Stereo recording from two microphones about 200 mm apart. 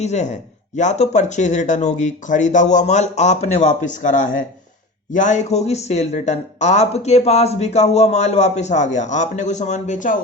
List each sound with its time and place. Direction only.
0.0 s speech: 35° left (ahead or behind)